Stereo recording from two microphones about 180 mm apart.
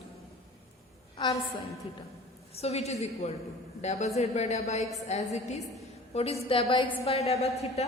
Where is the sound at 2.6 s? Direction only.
35° left (ahead or behind).